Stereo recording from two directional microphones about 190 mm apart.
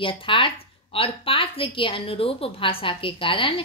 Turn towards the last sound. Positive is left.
turn(degrees=25)  # may be behind; listen again after turning